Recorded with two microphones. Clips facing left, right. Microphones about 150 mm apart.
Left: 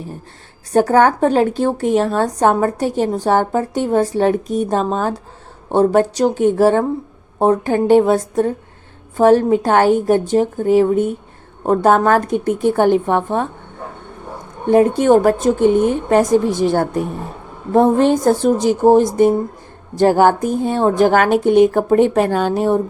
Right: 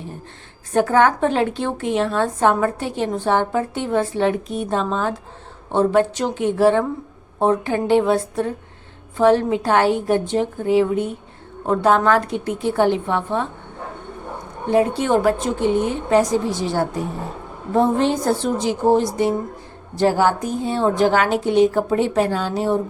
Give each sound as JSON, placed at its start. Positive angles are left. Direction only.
{"t": 0.7, "sound": "a woman's voice", "side_deg": 40}
{"t": 14.7, "sound": "a woman's voice", "side_deg": 50}